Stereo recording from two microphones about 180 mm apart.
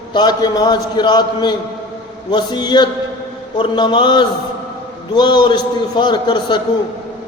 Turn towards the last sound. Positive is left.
turn(degrees=25)  # may be behind; listen again after turning